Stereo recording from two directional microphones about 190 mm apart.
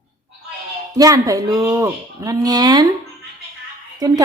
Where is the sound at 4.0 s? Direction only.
20° right (ahead or behind).